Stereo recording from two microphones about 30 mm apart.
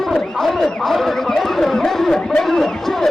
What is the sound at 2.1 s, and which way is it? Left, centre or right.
Speech, left.